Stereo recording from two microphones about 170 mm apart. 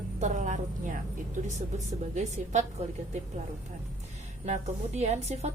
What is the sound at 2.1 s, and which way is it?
Speech, 45° right (ahead or behind).